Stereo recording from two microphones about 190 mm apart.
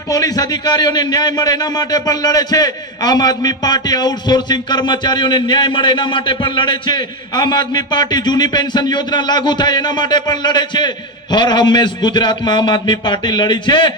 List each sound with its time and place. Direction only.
0.1 s a man's voice: 20° left (ahead or behind)